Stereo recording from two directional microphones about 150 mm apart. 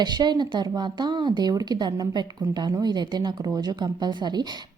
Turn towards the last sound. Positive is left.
turn(degrees=-30)  # may be behind; listen again after turning